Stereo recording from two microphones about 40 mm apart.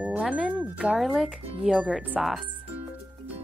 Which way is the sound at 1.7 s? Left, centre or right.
Right.